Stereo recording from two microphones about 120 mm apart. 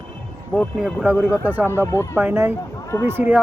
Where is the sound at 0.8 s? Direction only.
10° right (ahead or behind).